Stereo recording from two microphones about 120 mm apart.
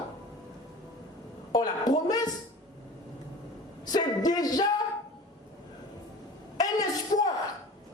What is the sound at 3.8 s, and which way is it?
Music, 35° left (ahead or behind).